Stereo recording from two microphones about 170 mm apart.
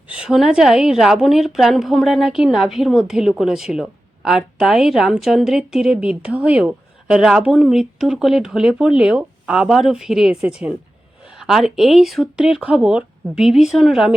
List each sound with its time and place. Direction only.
0.1 s a woman's voice: 5° right (ahead or behind)